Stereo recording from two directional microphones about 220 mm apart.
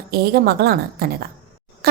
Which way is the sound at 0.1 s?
45° right (ahead or behind).